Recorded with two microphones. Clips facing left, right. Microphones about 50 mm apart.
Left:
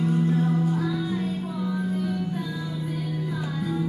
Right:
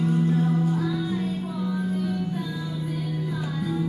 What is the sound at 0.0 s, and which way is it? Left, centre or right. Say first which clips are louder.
Music: even; centre.